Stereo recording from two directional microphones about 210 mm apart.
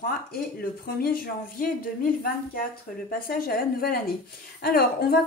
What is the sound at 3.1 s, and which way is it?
A woman's voice, 45° left (ahead or behind).